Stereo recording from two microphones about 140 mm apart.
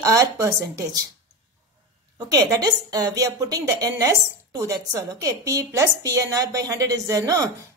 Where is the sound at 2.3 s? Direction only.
25° right (ahead or behind).